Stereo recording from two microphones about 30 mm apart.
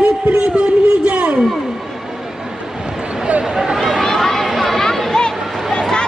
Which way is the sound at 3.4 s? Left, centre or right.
Right.